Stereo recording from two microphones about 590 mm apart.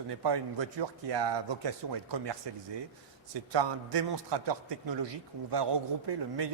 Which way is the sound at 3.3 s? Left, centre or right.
Right.